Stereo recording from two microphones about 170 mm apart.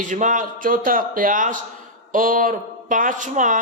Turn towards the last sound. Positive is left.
turn(degrees=-50)  # may be behind; listen again after turning